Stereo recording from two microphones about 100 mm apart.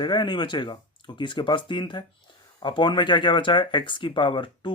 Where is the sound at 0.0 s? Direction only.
50° left (ahead or behind).